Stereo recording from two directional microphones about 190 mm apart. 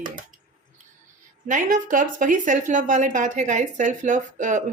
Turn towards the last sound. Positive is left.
turn(degrees=-40)  # may be behind; listen again after turning